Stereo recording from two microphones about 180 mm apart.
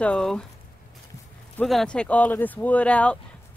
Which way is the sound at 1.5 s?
5° left (ahead or behind).